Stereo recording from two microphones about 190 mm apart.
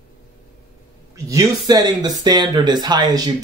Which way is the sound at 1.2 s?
20° right (ahead or behind).